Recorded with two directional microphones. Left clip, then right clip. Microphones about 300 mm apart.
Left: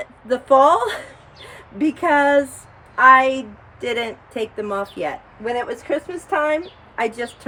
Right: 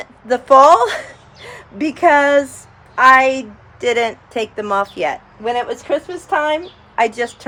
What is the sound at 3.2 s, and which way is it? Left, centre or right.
Speech, centre.